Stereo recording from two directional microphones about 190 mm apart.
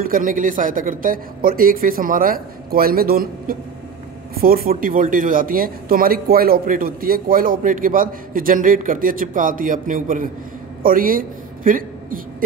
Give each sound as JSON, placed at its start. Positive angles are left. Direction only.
{"t": 0.0, "sound": "speech", "side_deg": -45}